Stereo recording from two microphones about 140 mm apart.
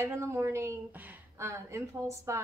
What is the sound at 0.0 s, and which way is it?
A woman's voice, 20° right (ahead or behind).